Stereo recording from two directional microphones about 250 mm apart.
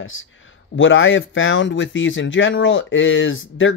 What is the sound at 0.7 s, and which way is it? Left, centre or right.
Speech, left.